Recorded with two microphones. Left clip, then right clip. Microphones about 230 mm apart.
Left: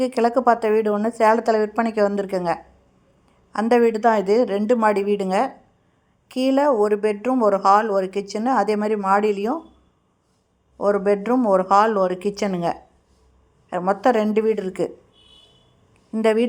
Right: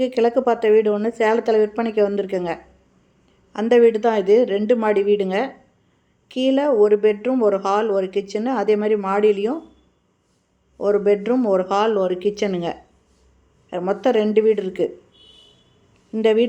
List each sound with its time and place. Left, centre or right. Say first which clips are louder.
0.0 s speech: even; left
10.8 s speech: right 1 dB; left
16.1 s speech: right 2 dB; left